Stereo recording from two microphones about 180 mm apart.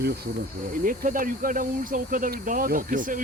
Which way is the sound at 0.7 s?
50° right (ahead or behind).